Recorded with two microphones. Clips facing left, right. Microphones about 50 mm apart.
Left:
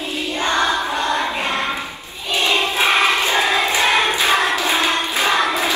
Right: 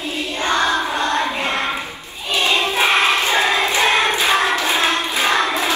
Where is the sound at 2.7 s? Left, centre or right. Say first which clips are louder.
Even; right.